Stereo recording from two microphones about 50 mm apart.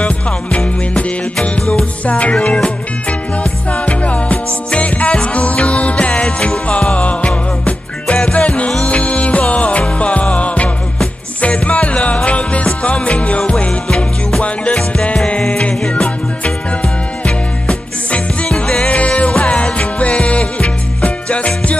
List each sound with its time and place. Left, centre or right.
0.0 s music: left
13.7 s music: centre
14.4 s music: left
18.9 s music: left